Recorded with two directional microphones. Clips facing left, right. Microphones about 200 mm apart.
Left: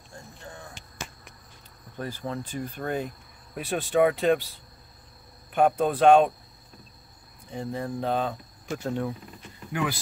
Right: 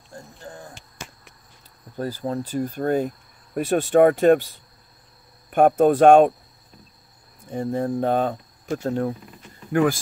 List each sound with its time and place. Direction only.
0.1 s a sound: 35° right (ahead or behind)
2.0 s speech: 35° right (ahead or behind)
5.5 s speech: 50° right (ahead or behind)
7.5 s speech: 50° right (ahead or behind)